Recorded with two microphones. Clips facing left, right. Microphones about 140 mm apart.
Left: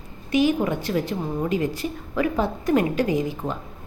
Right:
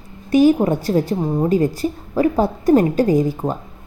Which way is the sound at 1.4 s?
40° right (ahead or behind).